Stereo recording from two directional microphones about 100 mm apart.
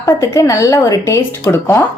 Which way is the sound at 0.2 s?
30° left (ahead or behind).